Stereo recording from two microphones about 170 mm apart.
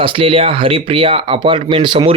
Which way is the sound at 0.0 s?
30° right (ahead or behind).